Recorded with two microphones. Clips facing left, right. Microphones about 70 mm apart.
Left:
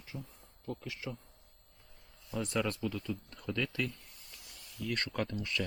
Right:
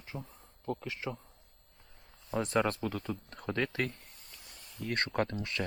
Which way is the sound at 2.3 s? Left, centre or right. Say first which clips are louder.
Right 4 dB; right.